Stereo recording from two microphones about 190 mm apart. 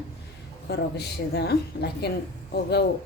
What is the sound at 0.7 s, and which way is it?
A woman's voice, 60° left (ahead or behind).